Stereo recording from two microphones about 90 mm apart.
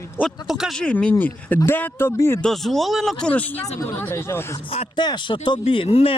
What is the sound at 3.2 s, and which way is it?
Speech, 15° left (ahead or behind).